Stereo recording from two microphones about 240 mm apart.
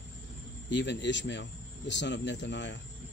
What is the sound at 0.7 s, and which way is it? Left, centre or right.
Speech, left.